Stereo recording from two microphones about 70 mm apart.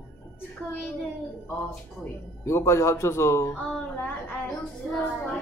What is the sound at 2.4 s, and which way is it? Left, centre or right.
A man's voice, left.